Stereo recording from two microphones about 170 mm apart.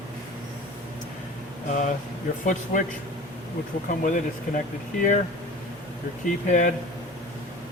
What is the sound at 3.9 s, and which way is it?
Speech, 50° left (ahead or behind).